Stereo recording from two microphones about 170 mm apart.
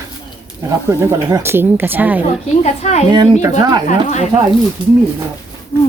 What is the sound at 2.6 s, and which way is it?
Speech, 40° left (ahead or behind).